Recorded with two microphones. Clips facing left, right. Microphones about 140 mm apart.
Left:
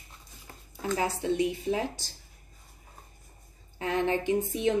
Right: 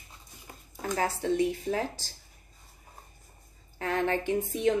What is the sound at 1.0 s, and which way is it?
Speech, 15° left (ahead or behind).